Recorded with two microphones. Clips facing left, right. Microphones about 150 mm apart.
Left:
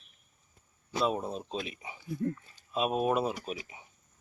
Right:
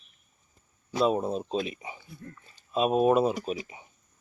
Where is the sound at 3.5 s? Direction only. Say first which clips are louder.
Right 6 dB; centre (ahead or behind).